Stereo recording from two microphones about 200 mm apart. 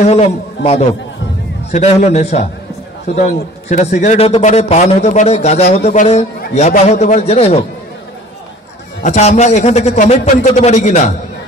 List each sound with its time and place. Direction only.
0.0 s a man's voice: 35° left (ahead or behind)
1.7 s a man's voice: 35° left (ahead or behind)
9.0 s a man's voice: 40° left (ahead or behind)